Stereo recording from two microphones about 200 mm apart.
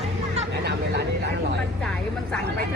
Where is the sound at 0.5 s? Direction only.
55° right (ahead or behind).